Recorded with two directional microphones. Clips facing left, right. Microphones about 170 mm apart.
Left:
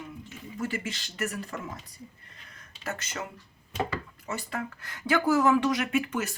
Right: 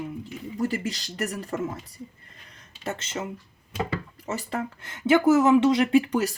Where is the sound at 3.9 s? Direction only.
35° right (ahead or behind).